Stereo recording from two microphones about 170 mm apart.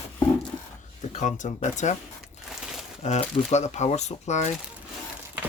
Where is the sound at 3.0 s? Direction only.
40° left (ahead or behind).